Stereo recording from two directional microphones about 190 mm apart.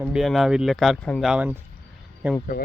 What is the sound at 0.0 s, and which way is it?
Speech, 5° right (ahead or behind).